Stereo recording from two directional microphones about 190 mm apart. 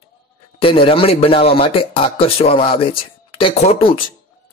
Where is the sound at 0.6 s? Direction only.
30° left (ahead or behind).